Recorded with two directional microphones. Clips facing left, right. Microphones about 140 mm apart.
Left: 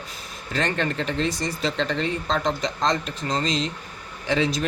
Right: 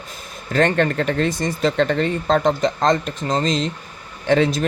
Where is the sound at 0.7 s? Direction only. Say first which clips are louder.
Right 6 dB; 50° right (ahead or behind).